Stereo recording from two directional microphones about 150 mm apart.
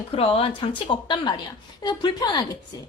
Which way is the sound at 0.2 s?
35° left (ahead or behind).